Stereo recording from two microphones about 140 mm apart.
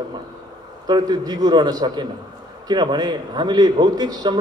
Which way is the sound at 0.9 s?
30° right (ahead or behind).